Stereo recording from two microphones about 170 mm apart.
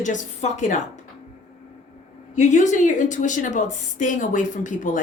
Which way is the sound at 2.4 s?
45° left (ahead or behind).